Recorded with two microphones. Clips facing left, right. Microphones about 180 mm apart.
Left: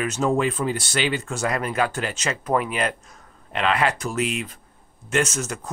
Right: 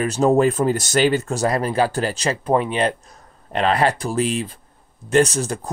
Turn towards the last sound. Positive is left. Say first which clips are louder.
# right 7 dB
turn(degrees=-35)  # may be behind; listen again after turning